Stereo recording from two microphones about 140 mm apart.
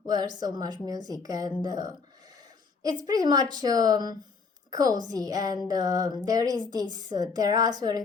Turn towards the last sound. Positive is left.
turn(degrees=-30)  # may be behind; listen again after turning